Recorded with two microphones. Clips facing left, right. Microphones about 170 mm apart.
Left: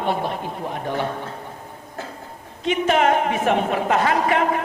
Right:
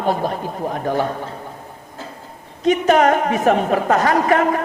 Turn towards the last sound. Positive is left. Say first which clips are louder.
# right 3 dB
turn(degrees=-40)  # may be behind; listen again after turning